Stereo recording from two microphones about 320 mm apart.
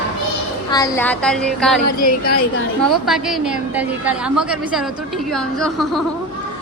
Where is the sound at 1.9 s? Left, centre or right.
Left.